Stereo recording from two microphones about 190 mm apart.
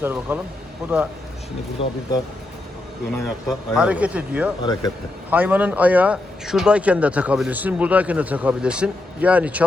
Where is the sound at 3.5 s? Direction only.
5° right (ahead or behind).